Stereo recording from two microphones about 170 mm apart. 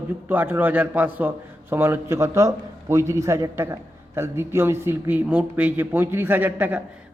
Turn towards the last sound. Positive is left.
turn(degrees=-10)  # may be behind; listen again after turning